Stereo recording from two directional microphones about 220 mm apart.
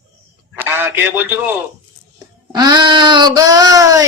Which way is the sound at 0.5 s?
10° right (ahead or behind).